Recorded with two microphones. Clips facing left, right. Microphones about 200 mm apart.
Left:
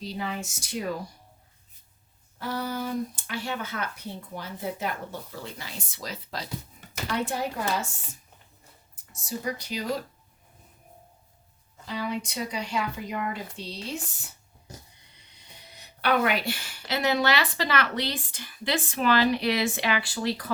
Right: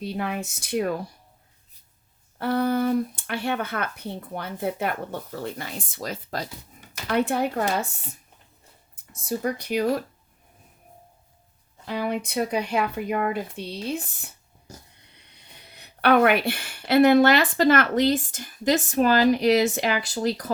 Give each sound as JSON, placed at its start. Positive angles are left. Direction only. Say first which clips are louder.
{"t": 0.0, "sound": "speech", "louder": "right 4 dB", "side_deg": -55}
{"t": 2.4, "sound": "speech", "louder": "right 9 dB", "side_deg": -60}
{"t": 7.1, "sound": "speech", "louder": "right 6 dB", "side_deg": -60}
{"t": 9.2, "sound": "speech", "louder": "right 5 dB", "side_deg": -55}
{"t": 11.9, "sound": "speech", "louder": "right 4 dB", "side_deg": -55}
{"t": 15.4, "sound": "speech", "louder": "even", "side_deg": -60}